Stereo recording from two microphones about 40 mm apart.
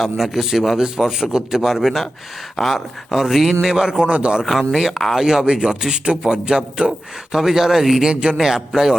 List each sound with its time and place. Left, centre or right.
0.0 s a man's voice: centre
1.6 s speech: centre; by 4.4 s right
4.4 s speech: centre
5.5 s speech: centre
7.3 s a man's voice: centre
8.0 s speech: right
8.4 s a man's voice: centre